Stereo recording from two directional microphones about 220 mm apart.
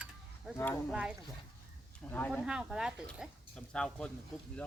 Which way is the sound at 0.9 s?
5° right (ahead or behind).